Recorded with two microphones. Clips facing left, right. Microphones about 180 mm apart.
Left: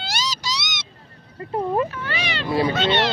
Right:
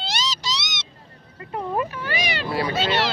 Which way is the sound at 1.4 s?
30° left (ahead or behind).